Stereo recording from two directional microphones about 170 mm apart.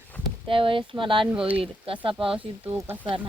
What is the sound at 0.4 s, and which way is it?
Speech, 30° right (ahead or behind).